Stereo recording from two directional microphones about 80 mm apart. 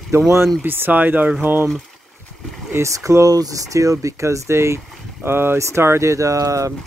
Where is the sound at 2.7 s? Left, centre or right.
Right.